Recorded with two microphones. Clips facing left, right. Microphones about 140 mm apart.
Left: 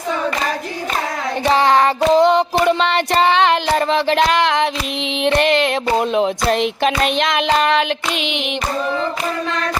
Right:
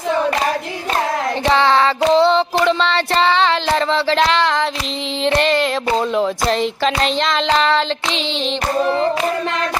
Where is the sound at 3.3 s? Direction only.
20° left (ahead or behind).